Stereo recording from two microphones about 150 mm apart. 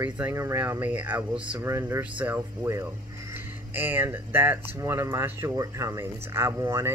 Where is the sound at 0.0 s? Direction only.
15° right (ahead or behind).